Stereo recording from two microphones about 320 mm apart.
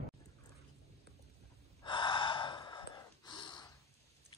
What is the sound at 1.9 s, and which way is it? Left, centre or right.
Gasp, centre.